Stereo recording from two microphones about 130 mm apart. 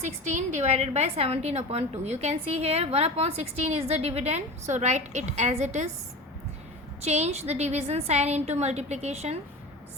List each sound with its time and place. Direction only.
0.0 s a woman's voice: 65° right (ahead or behind)
7.0 s a woman's voice: 55° right (ahead or behind)